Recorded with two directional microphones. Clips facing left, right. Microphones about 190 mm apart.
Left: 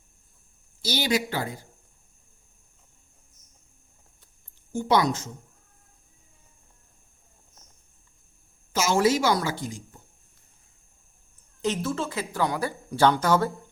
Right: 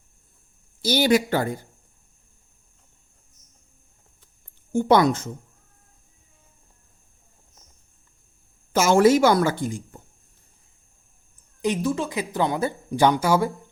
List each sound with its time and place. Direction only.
0.8 s a woman's voice: 55° right (ahead or behind)
4.7 s a woman's voice: 55° right (ahead or behind)
8.7 s a woman's voice: 55° right (ahead or behind)
11.6 s speech: 15° right (ahead or behind)